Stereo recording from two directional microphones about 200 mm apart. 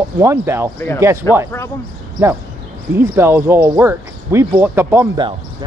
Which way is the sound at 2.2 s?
10° right (ahead or behind).